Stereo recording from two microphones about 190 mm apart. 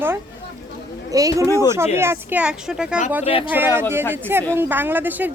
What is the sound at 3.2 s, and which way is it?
Speech, 30° left (ahead or behind).